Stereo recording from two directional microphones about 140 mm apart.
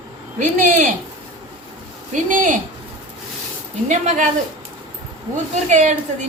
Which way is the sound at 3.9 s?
60° right (ahead or behind).